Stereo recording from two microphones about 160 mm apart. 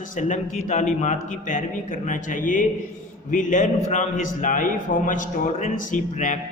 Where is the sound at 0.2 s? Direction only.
50° left (ahead or behind).